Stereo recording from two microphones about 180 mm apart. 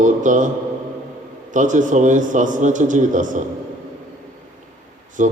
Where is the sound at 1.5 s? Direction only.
45° right (ahead or behind).